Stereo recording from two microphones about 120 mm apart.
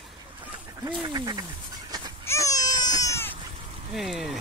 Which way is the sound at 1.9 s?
35° right (ahead or behind).